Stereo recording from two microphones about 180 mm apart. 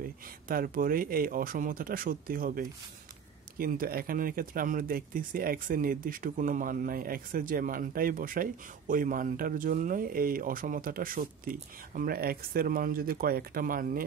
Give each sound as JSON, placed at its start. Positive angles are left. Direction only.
{"t": 0.0, "sound": "speech", "side_deg": -50}